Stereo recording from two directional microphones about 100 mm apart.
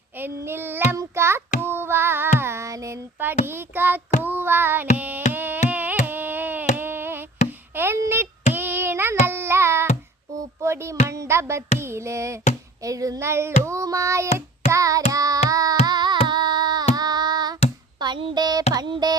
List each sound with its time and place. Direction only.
0.2 s child singing: 25° right (ahead or behind)
7.8 s a sound: 25° right (ahead or behind)
11.1 s music: 30° right (ahead or behind)
11.8 s child singing: 25° right (ahead or behind)
15.1 s carnatic music: 35° right (ahead or behind)
16.9 s child singing: 40° right (ahead or behind)
18.2 s speech: 60° right (ahead or behind)
18.7 s a sound: 45° right (ahead or behind)